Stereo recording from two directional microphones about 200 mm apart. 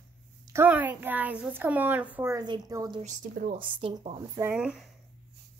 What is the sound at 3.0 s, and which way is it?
Speech, 45° right (ahead or behind).